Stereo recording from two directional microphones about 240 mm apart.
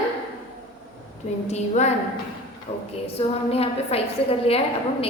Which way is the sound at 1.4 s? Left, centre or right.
Left.